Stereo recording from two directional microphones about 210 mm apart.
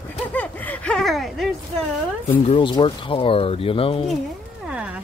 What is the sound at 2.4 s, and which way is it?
Speech, 25° left (ahead or behind).